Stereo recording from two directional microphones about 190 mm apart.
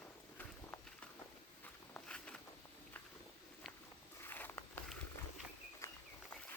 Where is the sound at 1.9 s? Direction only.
5° left (ahead or behind).